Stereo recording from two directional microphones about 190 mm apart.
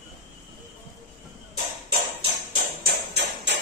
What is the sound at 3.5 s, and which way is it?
Music, 65° right (ahead or behind).